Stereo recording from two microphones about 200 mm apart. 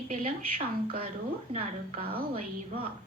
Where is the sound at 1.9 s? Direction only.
30° right (ahead or behind).